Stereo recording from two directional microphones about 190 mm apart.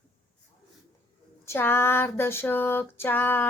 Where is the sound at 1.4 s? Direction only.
10° left (ahead or behind).